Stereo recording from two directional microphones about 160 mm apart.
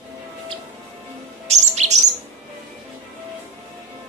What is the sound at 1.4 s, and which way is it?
Chirp, 45° right (ahead or behind).